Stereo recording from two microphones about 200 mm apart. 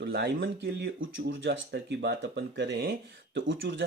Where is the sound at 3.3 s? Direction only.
65° right (ahead or behind).